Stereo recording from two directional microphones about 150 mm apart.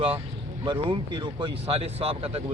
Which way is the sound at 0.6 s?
30° right (ahead or behind).